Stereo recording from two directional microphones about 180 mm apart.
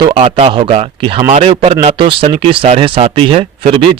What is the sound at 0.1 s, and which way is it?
Speech, 35° right (ahead or behind).